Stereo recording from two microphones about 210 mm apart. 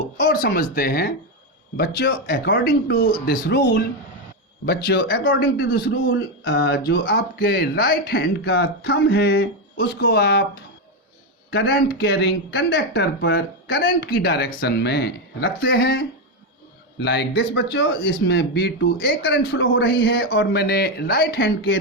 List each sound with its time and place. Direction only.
0.2 s a man's voice: 45° left (ahead or behind)
11.5 s a man's voice: 45° left (ahead or behind)
11.9 s a man's voice: 60° left (ahead or behind)